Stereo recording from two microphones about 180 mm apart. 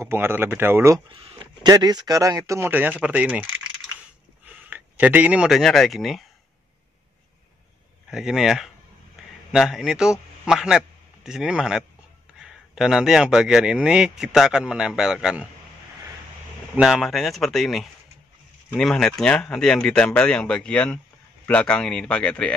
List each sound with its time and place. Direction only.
0.0 s speech: 15° right (ahead or behind)
1.1 s speech: 30° right (ahead or behind); by 3.4 s 10° right (ahead or behind)
4.6 s speech: 10° right (ahead or behind)
8.1 s speech: 5° right (ahead or behind)
16.7 s a man's voice: centre (ahead or behind)